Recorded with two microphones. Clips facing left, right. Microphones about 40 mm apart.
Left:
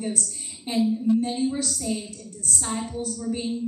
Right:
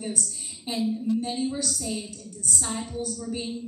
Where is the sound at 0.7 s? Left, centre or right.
Centre.